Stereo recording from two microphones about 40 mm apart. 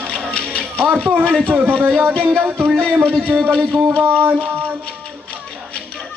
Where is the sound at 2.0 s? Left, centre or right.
Right.